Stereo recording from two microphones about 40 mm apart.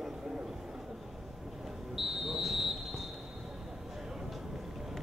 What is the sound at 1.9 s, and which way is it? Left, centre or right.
Whistle, centre.